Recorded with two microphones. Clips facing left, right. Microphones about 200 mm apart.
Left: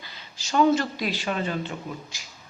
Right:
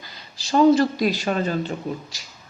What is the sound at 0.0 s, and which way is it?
Speech, 40° right (ahead or behind).